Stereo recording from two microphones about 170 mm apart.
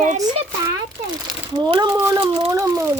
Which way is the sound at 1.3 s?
25° right (ahead or behind).